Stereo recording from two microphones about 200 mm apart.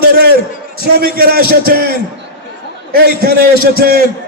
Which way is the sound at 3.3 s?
50° right (ahead or behind).